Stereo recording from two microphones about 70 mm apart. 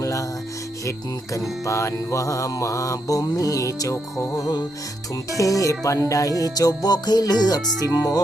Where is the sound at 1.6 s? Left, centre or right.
Left.